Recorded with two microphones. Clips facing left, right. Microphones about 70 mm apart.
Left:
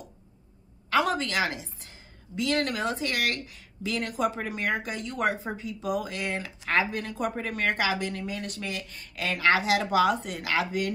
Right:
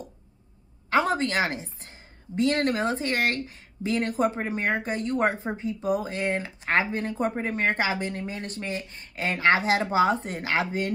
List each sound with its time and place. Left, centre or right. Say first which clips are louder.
0.8 s a woman's voice: right 2 dB; right